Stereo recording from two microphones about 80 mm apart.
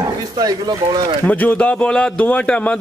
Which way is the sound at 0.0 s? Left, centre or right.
Right.